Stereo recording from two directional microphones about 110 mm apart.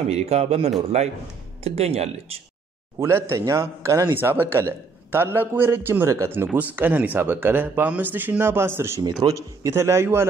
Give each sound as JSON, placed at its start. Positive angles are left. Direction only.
{"t": 0.1, "sound": "speech", "side_deg": -70}
{"t": 3.0, "sound": "a man's voice", "side_deg": -25}